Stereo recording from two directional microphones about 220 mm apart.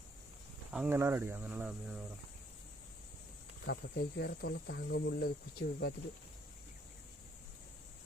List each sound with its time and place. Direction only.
0.7 s speech: 5° right (ahead or behind)
3.7 s speech: 50° left (ahead or behind)